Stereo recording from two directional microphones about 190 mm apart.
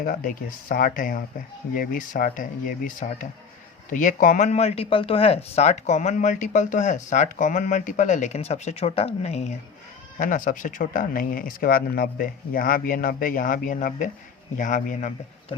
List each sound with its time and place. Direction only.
0.0 s speech: 45° left (ahead or behind)